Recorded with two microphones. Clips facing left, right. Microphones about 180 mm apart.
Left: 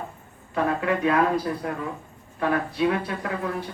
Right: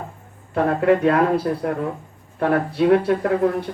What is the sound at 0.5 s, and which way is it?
Speech, 50° right (ahead or behind).